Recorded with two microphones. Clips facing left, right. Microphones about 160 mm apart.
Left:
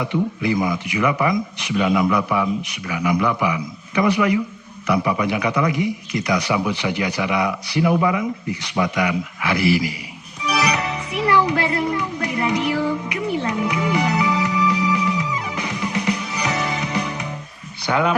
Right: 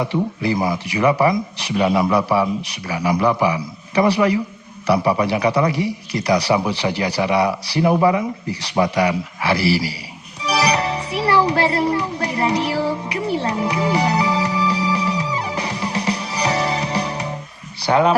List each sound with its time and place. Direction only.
0.0 s a man's voice: 35° right (ahead or behind)
10.4 s music: 35° right (ahead or behind)
17.7 s a sound: 35° right (ahead or behind)